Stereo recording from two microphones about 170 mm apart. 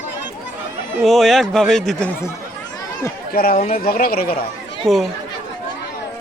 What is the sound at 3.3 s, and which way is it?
Speech, 60° left (ahead or behind).